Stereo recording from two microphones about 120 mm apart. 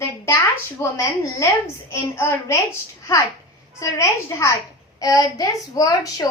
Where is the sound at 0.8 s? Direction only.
25° left (ahead or behind).